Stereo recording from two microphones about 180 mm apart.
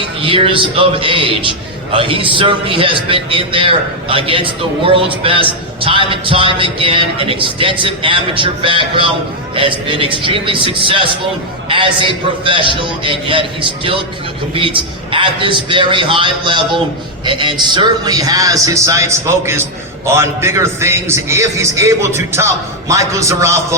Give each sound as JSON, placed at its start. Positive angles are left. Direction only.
{"t": 0.2, "sound": "a man's voice", "side_deg": -30}